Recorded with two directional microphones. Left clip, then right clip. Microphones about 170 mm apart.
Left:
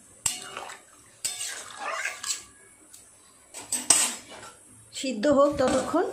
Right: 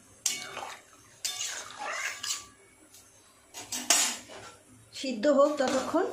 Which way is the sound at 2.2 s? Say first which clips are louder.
Left 1 dB; centre (ahead or behind).